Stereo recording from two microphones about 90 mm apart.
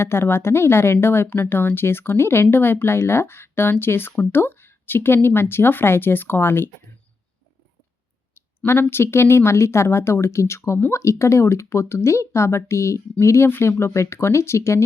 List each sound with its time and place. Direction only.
0.0 s speech: 25° left (ahead or behind)
8.4 s speech: 25° left (ahead or behind)